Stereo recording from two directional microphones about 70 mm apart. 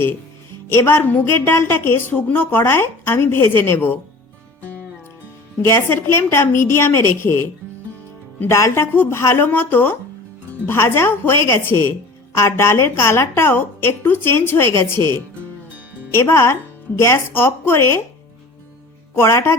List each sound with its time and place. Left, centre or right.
0.7 s a woman's voice: left
5.6 s a woman's voice: left
8.4 s a woman's voice: left
16.1 s a woman's voice: left
19.1 s a woman's voice: left